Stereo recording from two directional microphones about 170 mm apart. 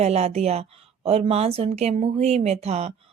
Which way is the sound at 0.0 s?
40° right (ahead or behind).